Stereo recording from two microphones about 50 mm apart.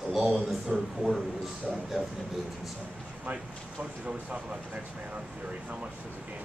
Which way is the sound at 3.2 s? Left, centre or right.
Right.